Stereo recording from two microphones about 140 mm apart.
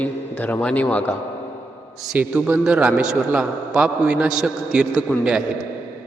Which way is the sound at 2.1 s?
10° right (ahead or behind).